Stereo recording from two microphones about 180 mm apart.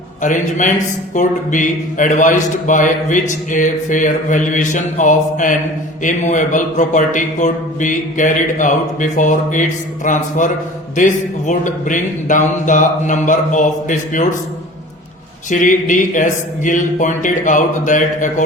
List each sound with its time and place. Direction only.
0.2 s speech: 45° left (ahead or behind)
15.4 s speech: 45° left (ahead or behind)